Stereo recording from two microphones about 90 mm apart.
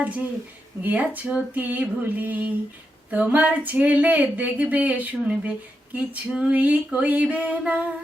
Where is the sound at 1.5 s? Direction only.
20° right (ahead or behind).